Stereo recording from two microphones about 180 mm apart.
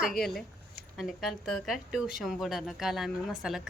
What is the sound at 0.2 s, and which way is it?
Speech, centre (ahead or behind).